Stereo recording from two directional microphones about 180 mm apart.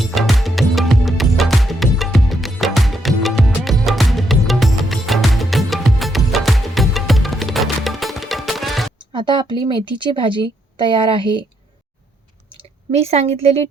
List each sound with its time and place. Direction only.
0.0 s music: centre (ahead or behind)
9.1 s a woman's voice: 25° right (ahead or behind)
12.9 s a woman's voice: 35° right (ahead or behind)